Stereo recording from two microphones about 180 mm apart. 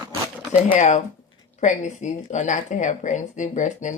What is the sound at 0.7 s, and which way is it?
Speech, 40° left (ahead or behind).